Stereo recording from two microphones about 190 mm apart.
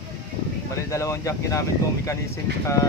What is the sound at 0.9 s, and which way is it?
Speech, 15° left (ahead or behind).